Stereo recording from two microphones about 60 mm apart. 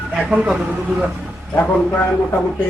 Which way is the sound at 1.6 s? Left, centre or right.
Left.